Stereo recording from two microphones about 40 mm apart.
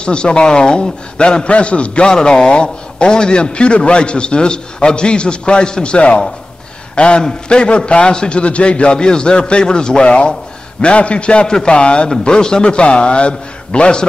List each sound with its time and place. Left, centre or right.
0.0 s a man's voice: left